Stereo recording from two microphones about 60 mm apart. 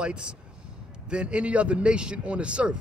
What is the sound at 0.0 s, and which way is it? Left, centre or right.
A man's voice, centre.